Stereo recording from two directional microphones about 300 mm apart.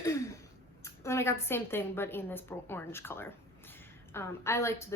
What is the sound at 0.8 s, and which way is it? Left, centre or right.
A woman's voice, centre.